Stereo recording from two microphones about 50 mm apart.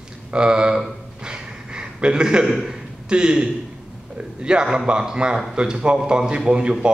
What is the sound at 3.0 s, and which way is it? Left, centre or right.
A man's voice, centre.